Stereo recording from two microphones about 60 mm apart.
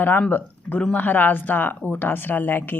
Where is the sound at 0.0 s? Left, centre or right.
Left.